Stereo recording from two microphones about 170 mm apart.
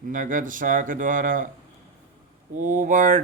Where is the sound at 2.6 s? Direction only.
50° right (ahead or behind).